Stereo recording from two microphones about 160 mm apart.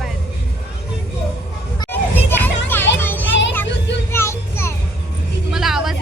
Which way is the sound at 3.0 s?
15° left (ahead or behind).